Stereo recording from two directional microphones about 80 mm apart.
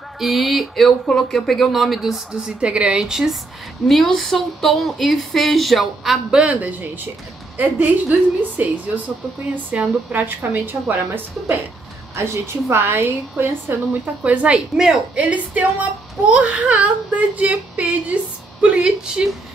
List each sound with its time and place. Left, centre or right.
0.2 s speech: centre
6.4 s a woman's voice: centre
14.2 s speech: centre